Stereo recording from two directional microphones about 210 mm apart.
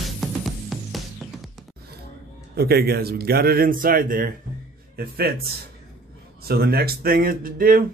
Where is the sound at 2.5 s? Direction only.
50° right (ahead or behind).